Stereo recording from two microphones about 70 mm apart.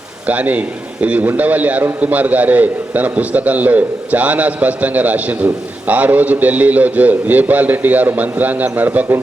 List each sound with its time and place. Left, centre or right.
0.3 s a man's voice: right